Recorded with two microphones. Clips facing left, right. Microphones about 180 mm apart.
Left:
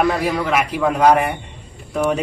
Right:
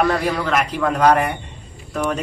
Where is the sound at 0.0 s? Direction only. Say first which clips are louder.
Left 1 dB; 5° left (ahead or behind).